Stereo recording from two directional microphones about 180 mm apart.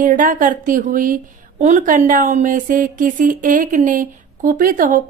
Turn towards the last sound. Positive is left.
turn(degrees=-50)  # may be behind; listen again after turning